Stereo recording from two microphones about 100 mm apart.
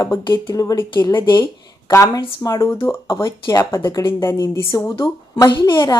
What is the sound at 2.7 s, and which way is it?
Speech, 30° left (ahead or behind).